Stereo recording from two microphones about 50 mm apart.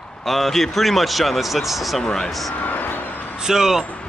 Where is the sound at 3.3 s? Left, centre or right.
Centre.